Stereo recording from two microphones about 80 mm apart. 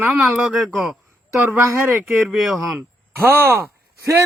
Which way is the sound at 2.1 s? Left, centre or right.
Centre.